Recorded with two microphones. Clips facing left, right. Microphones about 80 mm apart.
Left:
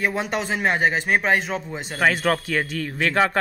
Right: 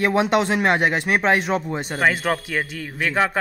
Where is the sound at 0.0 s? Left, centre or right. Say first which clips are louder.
Right 6 dB; right.